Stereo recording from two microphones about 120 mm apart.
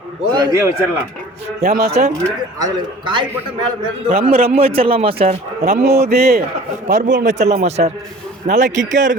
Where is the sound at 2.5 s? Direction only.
35° right (ahead or behind).